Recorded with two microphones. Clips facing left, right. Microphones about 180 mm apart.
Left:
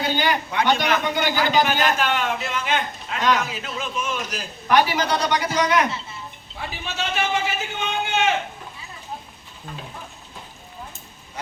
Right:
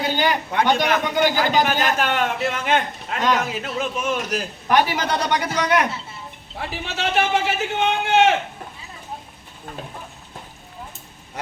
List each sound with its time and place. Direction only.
0.2 s a man's voice: 45° right (ahead or behind)
6.6 s a man's voice: 70° right (ahead or behind)